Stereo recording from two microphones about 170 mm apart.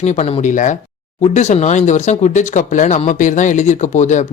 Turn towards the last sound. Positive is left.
turn(degrees=45)  # may be behind; listen again after turning